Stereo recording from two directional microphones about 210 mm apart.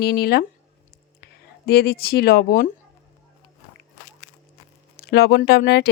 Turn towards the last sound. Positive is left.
turn(degrees=50)  # may be behind; listen again after turning